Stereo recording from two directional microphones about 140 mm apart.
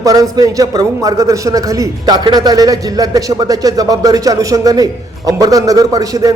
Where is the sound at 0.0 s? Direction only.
25° right (ahead or behind).